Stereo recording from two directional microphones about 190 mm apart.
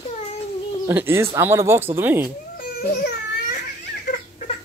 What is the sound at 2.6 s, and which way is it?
Baby cry, 55° left (ahead or behind).